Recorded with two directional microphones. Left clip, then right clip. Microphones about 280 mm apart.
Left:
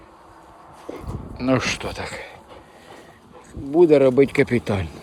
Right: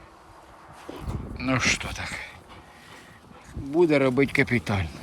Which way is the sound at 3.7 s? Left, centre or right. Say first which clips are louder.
Left 7 dB; centre.